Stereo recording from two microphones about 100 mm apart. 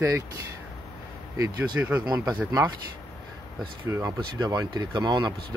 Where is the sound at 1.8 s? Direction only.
20° right (ahead or behind).